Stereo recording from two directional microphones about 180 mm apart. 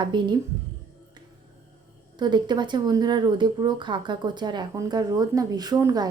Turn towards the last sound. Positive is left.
turn(degrees=-20)  # may be behind; listen again after turning